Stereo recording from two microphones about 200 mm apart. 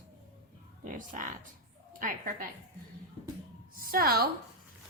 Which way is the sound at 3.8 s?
45° right (ahead or behind).